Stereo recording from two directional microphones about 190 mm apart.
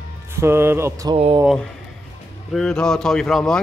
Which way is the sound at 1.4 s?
Centre (ahead or behind).